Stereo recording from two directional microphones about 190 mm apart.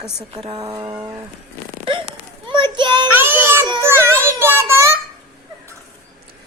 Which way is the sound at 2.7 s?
25° right (ahead or behind).